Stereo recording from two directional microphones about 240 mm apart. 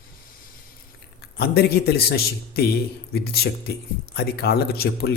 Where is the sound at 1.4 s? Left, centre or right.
Left.